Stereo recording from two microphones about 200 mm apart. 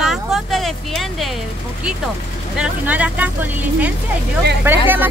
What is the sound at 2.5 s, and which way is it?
Speech, 5° right (ahead or behind).